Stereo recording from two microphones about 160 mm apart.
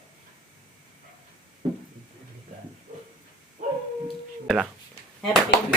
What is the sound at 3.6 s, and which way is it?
Dog, 50° right (ahead or behind).